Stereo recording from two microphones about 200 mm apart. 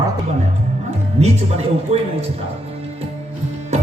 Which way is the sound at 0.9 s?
35° right (ahead or behind).